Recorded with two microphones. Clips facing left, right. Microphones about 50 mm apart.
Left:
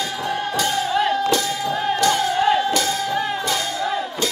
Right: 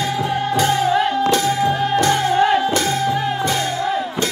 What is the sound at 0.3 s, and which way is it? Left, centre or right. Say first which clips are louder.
Music: right 3 dB; right.